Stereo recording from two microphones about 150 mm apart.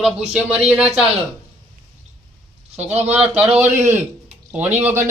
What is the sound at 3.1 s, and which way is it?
Speech, 10° right (ahead or behind).